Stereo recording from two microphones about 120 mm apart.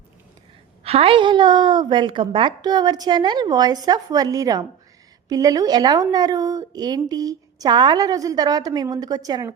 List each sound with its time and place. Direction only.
0.9 s a woman's voice: 55° right (ahead or behind); by 9.5 s 30° right (ahead or behind)